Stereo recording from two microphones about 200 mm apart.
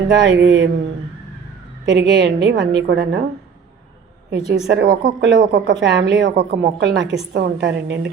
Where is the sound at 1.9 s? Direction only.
60° right (ahead or behind).